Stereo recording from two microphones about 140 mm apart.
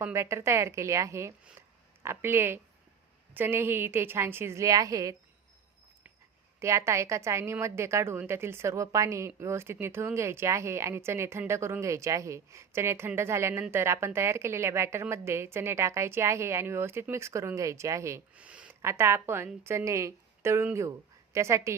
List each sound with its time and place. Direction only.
0.0 s a woman's voice: 20° right (ahead or behind)
6.6 s speech: 20° right (ahead or behind)
18.3 s speech: 10° right (ahead or behind)